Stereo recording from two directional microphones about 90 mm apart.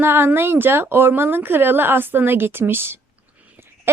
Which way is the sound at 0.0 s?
25° right (ahead or behind).